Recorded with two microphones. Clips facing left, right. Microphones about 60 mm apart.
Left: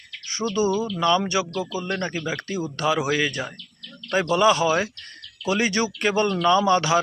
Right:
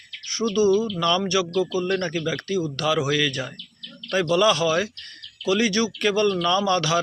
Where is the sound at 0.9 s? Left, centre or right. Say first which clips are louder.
Left 1 dB; centre.